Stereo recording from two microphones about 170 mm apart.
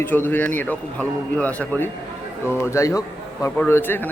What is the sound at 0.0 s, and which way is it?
A man's voice, 10° left (ahead or behind).